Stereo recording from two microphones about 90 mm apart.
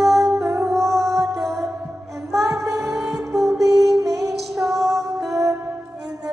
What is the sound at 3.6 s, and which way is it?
Music, 40° right (ahead or behind).